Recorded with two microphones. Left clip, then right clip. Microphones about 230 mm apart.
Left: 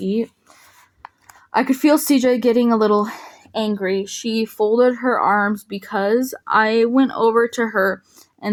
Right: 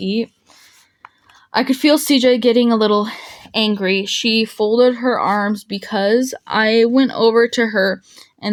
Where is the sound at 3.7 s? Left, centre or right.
Right.